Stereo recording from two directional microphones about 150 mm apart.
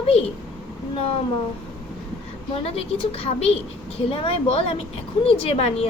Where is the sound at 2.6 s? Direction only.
35° left (ahead or behind).